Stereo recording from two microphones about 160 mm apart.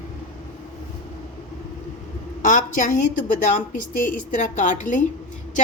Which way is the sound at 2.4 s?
55° left (ahead or behind).